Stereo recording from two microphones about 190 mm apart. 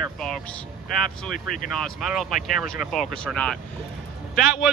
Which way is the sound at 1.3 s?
45° left (ahead or behind).